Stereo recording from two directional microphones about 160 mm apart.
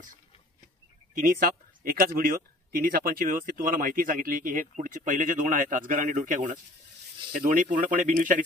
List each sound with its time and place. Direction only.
1.1 s speech: 60° right (ahead or behind)